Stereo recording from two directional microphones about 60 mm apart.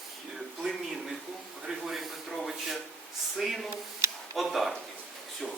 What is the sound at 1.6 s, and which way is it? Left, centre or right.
A man's voice, centre.